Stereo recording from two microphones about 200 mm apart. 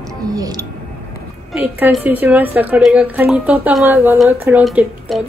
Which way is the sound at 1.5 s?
10° right (ahead or behind).